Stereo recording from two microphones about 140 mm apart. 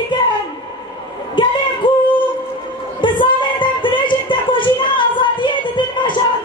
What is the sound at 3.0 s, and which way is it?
Music, 35° left (ahead or behind).